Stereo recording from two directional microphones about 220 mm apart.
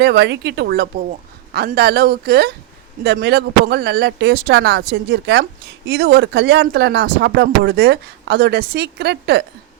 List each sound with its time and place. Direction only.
0.0 s speech: 50° right (ahead or behind)